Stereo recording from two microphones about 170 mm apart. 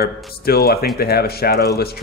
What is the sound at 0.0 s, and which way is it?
Speech, 65° left (ahead or behind).